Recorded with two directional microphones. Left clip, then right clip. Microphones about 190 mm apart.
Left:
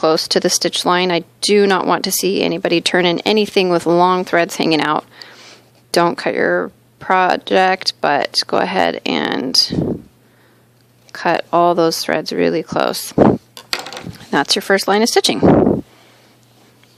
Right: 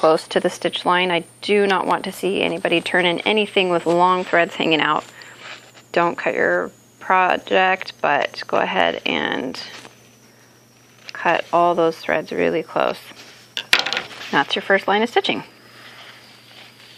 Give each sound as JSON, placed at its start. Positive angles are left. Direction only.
{"t": 0.0, "sound": "speech", "side_deg": 30}
{"t": 11.1, "sound": "speech", "side_deg": 50}
{"t": 13.5, "sound": "a sound", "side_deg": 5}
{"t": 14.3, "sound": "speech", "side_deg": 50}